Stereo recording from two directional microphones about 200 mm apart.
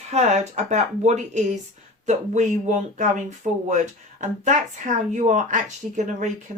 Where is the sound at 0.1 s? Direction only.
35° right (ahead or behind).